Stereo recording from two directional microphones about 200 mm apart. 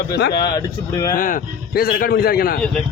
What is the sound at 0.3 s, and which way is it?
Speech, 20° left (ahead or behind).